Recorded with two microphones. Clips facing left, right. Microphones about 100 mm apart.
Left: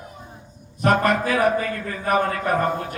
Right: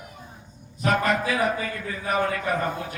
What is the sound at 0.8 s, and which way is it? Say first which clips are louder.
A man's voice: left 4 dB; 55° left (ahead or behind).